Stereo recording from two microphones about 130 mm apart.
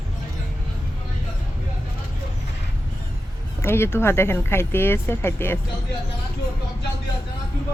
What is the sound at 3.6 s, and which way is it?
Speech, 20° left (ahead or behind).